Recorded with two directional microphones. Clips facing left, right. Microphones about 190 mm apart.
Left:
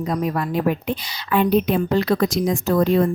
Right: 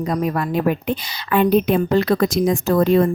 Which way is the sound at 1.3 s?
55° right (ahead or behind).